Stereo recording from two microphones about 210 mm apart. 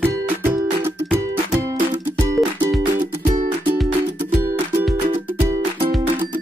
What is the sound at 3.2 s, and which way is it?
Music, 40° right (ahead or behind).